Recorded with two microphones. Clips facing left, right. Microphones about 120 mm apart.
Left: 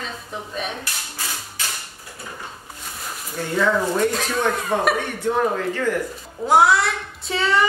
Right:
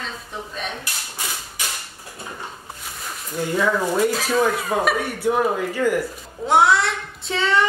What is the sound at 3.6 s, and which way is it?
Speech, 5° right (ahead or behind).